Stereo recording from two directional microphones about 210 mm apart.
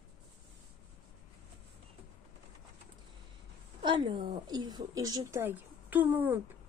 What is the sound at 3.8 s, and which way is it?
A woman's voice, 25° right (ahead or behind).